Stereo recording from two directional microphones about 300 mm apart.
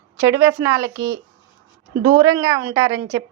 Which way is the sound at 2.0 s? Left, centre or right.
Centre.